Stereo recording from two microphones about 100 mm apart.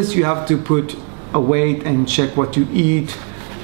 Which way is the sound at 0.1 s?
20° right (ahead or behind).